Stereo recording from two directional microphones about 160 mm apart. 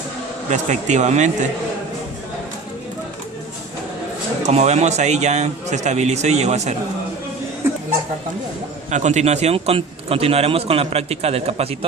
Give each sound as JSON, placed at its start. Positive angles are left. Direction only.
{"t": 0.5, "sound": "a man's voice", "side_deg": -50}
{"t": 4.4, "sound": "a man's voice", "side_deg": -45}
{"t": 8.9, "sound": "a man's voice", "side_deg": -45}